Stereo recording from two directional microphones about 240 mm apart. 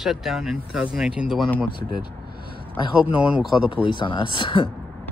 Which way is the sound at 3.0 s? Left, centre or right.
Centre.